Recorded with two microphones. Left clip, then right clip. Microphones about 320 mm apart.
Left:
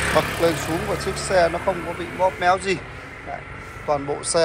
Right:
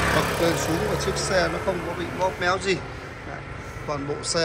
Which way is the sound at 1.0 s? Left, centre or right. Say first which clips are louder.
Left 7 dB; centre.